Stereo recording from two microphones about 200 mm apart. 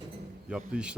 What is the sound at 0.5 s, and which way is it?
Speech, 5° right (ahead or behind).